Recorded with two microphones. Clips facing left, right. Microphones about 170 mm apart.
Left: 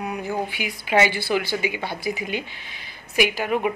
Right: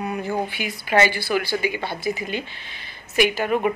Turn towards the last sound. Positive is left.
turn(degrees=10)  # may be behind; listen again after turning